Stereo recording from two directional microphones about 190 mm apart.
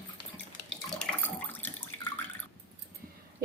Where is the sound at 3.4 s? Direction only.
50° right (ahead or behind).